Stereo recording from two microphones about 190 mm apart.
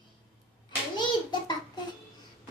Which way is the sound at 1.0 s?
25° left (ahead or behind).